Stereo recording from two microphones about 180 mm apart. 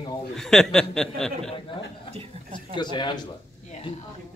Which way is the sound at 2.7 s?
25° left (ahead or behind).